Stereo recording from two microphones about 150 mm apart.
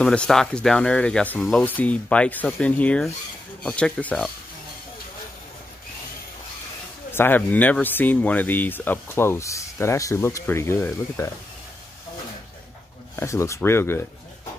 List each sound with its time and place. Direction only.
0.0 s speech: 5° left (ahead or behind)
7.1 s speech: 15° left (ahead or behind)
13.1 s speech: 20° left (ahead or behind)